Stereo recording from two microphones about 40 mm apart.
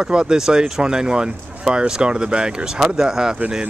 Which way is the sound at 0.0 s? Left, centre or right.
Centre.